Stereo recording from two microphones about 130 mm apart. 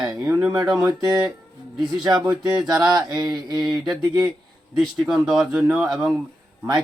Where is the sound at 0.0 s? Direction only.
5° right (ahead or behind).